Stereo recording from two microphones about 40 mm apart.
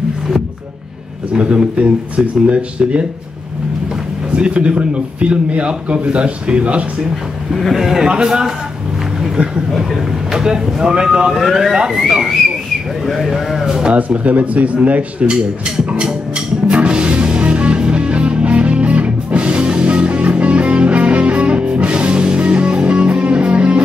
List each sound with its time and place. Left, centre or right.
1.3 s speech: right
4.3 s a man's voice: right
7.7 s speech: centre
10.3 s speech: centre
11.3 s sheep: centre
12.1 s speech: centre
13.0 s sheep: centre
13.9 s a man's voice: right
15.8 s music: right